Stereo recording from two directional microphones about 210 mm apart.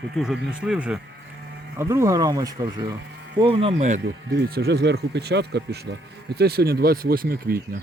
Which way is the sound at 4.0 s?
55° right (ahead or behind).